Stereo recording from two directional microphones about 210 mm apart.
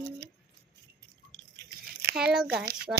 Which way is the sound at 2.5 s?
45° right (ahead or behind).